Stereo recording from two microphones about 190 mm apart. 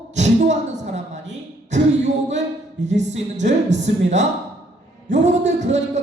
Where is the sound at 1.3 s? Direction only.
40° right (ahead or behind).